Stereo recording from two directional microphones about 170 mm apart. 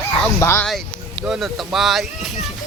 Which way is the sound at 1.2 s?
Centre (ahead or behind).